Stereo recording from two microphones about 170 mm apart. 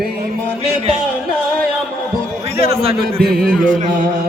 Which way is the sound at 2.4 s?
35° right (ahead or behind).